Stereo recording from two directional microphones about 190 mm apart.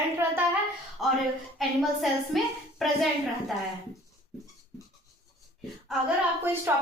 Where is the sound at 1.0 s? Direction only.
Centre (ahead or behind).